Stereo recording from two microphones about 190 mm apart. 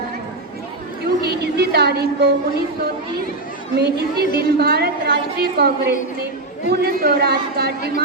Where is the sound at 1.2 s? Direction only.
60° right (ahead or behind).